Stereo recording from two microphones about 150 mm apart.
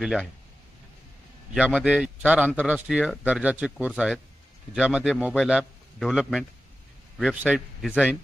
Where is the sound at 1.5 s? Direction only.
10° right (ahead or behind).